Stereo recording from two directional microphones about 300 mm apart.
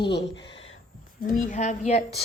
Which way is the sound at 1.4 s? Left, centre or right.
Left.